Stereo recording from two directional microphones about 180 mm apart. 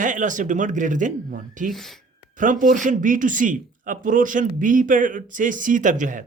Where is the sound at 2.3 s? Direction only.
45° right (ahead or behind).